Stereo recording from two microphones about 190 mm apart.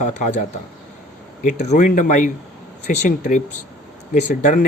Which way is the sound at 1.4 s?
40° left (ahead or behind).